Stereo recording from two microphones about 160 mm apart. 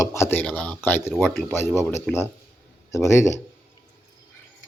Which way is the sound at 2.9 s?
20° left (ahead or behind).